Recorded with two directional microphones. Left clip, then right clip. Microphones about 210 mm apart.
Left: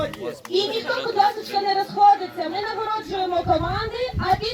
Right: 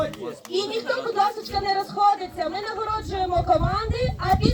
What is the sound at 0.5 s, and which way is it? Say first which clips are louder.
Speech: left 2 dB; 25° right (ahead or behind).